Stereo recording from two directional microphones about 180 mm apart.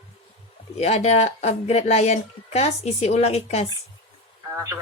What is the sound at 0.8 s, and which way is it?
Speech, 35° left (ahead or behind).